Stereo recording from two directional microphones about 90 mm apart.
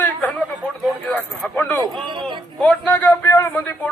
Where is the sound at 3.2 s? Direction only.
35° left (ahead or behind).